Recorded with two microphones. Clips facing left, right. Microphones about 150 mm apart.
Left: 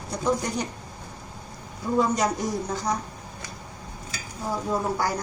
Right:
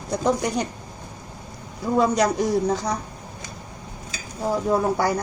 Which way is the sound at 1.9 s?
90° right.